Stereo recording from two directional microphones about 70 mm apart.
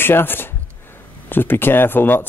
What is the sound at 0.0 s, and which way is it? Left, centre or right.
Speech, left.